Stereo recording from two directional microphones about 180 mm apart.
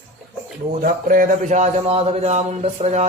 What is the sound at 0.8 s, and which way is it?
Speech, 50° right (ahead or behind).